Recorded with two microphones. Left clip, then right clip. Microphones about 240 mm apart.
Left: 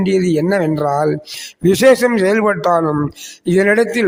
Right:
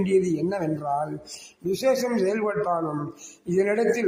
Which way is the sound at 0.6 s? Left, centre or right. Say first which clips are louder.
Left 10 dB; left.